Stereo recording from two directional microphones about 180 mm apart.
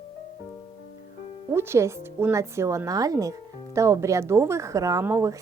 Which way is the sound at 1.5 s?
15° right (ahead or behind).